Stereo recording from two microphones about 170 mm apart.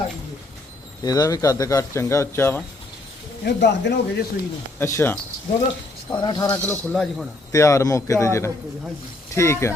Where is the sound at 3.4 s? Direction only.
90° left.